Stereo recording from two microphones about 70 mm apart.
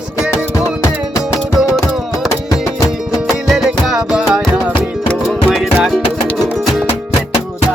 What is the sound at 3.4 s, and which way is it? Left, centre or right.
Music, centre.